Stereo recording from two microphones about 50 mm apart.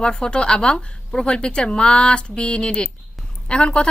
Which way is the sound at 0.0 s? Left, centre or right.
Centre.